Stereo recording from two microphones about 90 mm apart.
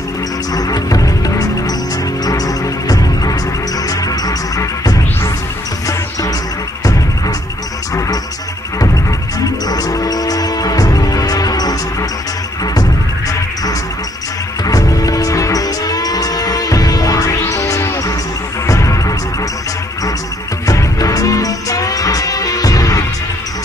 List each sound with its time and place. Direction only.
0.6 s music: 45° left (ahead or behind)
6.8 s music: 45° left (ahead or behind)
9.4 s music: 45° left (ahead or behind)
14.6 s music: 45° left (ahead or behind)
20.6 s music: 40° left (ahead or behind)